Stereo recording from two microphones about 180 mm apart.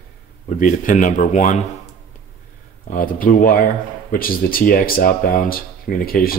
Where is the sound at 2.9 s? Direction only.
50° left (ahead or behind).